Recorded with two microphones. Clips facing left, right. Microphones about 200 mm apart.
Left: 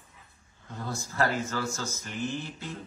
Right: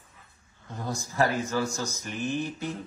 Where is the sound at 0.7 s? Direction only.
15° right (ahead or behind).